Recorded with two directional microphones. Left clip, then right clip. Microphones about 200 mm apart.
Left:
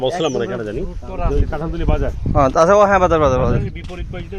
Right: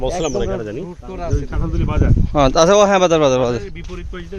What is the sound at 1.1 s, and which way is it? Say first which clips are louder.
Speech: left 3 dB; 25° right (ahead or behind).